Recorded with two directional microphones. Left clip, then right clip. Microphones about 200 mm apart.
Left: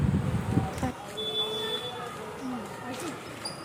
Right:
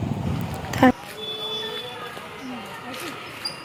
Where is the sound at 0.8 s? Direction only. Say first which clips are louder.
Right 17 dB; 50° right (ahead or behind).